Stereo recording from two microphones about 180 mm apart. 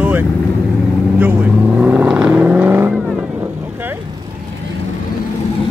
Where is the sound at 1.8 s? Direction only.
10° right (ahead or behind).